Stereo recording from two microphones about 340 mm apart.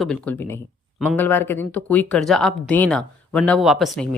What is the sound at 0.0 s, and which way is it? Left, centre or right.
Speech, centre.